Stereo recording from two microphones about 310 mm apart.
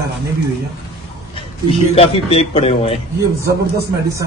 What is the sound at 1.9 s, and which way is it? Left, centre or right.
A man's voice, centre.